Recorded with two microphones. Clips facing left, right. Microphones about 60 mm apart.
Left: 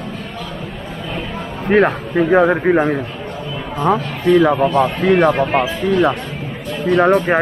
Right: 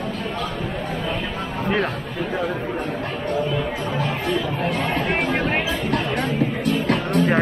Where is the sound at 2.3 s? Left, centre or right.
Left.